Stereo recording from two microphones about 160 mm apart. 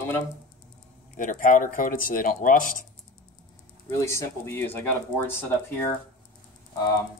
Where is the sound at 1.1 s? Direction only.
55° left (ahead or behind).